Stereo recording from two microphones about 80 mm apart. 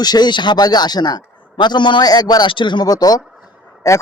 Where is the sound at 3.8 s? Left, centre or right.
Left.